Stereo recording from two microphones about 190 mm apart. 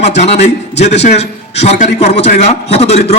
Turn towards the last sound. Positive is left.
turn(degrees=35)  # may be behind; listen again after turning